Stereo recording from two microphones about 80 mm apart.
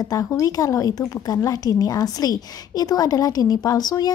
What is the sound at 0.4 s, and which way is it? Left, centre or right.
A woman's voice, left.